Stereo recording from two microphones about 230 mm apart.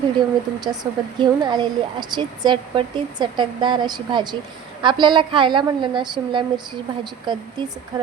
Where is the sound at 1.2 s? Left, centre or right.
Centre.